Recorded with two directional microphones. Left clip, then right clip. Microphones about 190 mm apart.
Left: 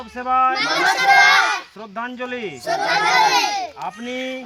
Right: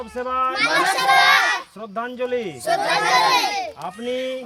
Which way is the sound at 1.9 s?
60° right (ahead or behind).